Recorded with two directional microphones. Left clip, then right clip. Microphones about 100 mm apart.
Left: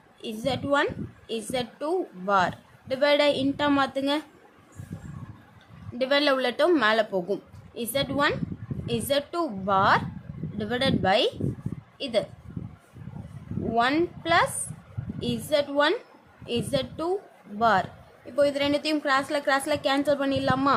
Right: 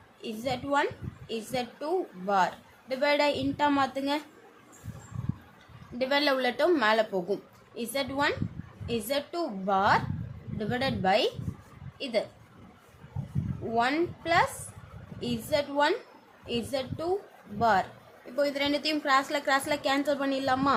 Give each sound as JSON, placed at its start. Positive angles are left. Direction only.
{"t": 0.2, "sound": "a woman's voice", "side_deg": 45}
{"t": 6.0, "sound": "a woman's voice", "side_deg": 45}
{"t": 13.7, "sound": "a woman's voice", "side_deg": 45}